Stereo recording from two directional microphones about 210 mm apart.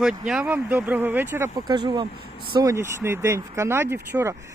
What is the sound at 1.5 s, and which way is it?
Speech, 20° right (ahead or behind).